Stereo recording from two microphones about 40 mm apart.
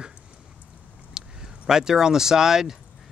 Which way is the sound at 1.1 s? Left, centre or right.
Centre.